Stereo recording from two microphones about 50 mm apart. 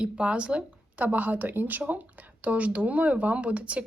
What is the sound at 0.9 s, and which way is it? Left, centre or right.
Speech, right.